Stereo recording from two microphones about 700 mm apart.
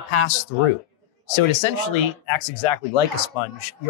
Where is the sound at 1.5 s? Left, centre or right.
Left.